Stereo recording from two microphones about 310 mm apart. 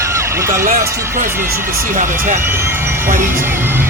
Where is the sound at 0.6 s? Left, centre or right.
Right.